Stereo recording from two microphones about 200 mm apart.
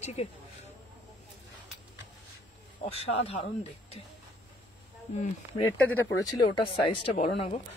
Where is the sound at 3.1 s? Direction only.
30° left (ahead or behind).